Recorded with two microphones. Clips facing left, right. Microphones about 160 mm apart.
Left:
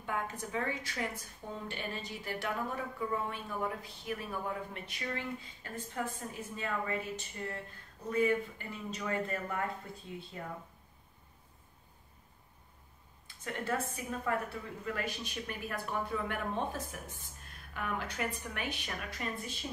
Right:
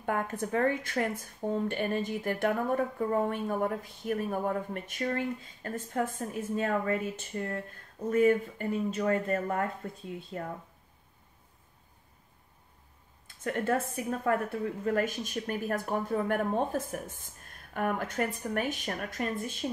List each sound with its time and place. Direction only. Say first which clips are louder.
0.0 s a woman's voice: right 6 dB; 55° right (ahead or behind)
13.3 s a woman's voice: right 7 dB; 50° right (ahead or behind)